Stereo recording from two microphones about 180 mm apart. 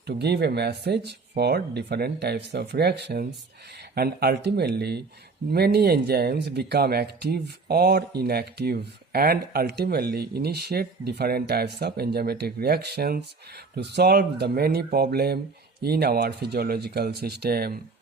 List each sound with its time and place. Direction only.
0.1 s speech: 65° right (ahead or behind)